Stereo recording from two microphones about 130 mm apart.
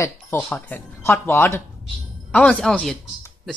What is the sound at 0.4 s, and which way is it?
Speech, 10° left (ahead or behind).